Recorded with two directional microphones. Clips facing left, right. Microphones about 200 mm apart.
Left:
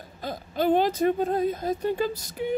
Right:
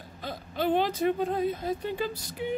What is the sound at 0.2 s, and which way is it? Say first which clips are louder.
Speech: left 4 dB; 40° left (ahead or behind).